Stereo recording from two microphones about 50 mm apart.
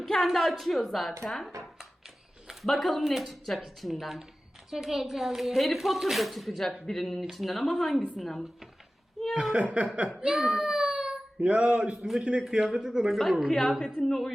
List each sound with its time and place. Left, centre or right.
0.0 s a woman's voice: centre
1.2 s dishes: centre
2.0 s a sound: centre
2.6 s a woman's voice: centre
9.3 s speech: centre
9.6 s mantra: right
10.2 s a sound: centre
11.3 s mantra: right
12.4 s speech: centre
13.5 s a woman's voice: centre